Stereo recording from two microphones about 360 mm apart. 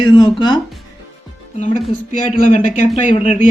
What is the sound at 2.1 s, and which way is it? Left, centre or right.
Speech, left.